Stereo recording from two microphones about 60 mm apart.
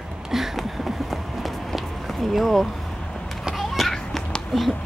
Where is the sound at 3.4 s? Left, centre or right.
Centre.